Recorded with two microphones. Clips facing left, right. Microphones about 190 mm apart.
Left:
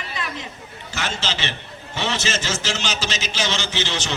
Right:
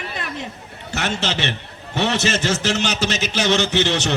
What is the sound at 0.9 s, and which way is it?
A man's voice, 65° right (ahead or behind).